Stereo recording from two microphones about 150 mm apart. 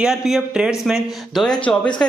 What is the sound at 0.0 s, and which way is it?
Speech, centre (ahead or behind).